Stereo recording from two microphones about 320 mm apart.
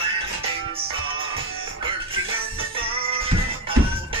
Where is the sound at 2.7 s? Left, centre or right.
Centre.